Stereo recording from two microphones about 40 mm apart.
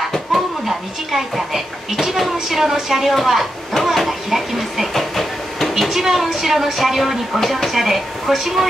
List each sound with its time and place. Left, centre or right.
0.1 s a woman's voice: centre